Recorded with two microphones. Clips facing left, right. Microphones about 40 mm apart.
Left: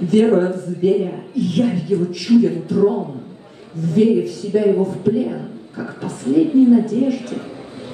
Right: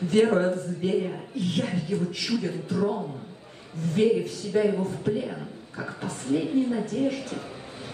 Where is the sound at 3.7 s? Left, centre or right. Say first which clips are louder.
Left 7 dB; right.